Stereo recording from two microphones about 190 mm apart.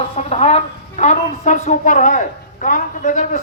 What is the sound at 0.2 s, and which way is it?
A woman's voice, 35° left (ahead or behind).